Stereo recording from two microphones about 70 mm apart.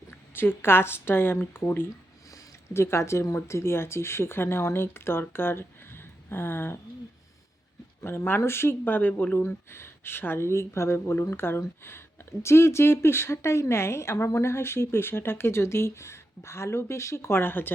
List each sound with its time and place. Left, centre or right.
0.1 s speech: left
8.0 s speech: left